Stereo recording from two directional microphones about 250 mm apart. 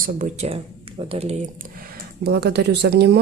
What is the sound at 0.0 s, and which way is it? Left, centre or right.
Speech, right.